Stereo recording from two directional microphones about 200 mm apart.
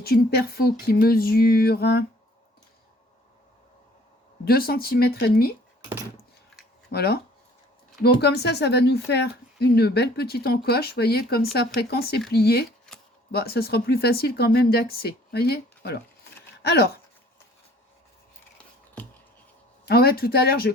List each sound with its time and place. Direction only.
0.0 s speech: 50° left (ahead or behind)
4.4 s speech: 50° left (ahead or behind)
6.9 s speech: 50° left (ahead or behind)
19.0 s a sound: 5° left (ahead or behind)
19.9 s speech: 50° left (ahead or behind)